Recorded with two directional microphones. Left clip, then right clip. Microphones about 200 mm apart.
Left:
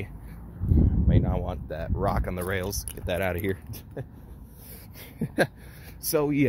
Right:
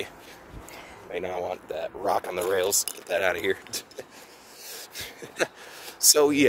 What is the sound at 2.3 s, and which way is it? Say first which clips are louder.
Speech: right 6 dB; 35° right (ahead or behind).